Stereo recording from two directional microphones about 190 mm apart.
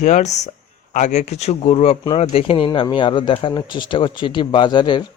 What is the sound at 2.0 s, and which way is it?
Speech, 20° left (ahead or behind).